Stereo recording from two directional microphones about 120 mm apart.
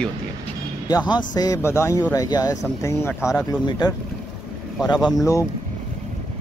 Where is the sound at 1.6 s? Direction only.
20° left (ahead or behind).